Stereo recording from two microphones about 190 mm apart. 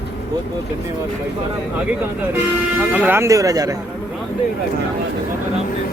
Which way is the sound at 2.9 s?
10° right (ahead or behind).